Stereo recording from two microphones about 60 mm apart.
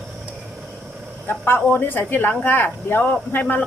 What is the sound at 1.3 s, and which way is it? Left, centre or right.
Speech, left.